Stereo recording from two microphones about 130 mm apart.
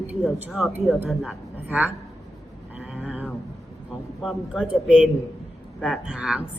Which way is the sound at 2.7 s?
10° right (ahead or behind).